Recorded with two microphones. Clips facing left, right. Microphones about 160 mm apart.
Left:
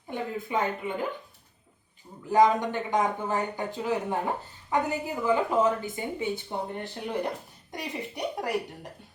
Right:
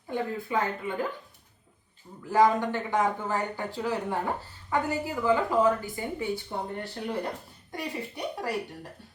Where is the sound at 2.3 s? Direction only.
20° left (ahead or behind).